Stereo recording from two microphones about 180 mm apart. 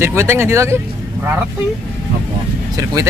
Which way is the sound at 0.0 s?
15° right (ahead or behind).